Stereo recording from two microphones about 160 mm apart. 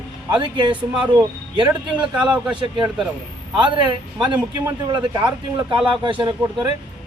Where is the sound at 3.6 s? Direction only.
30° right (ahead or behind).